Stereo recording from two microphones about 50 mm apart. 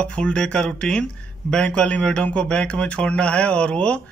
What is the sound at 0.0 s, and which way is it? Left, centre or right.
A man's voice, left.